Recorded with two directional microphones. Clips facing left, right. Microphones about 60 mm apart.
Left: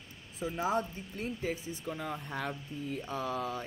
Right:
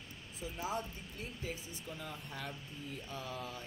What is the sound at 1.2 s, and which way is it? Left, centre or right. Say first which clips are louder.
Speech: left 8 dB; left.